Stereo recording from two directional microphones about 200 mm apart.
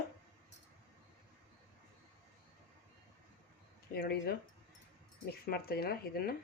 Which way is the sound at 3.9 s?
50° left (ahead or behind).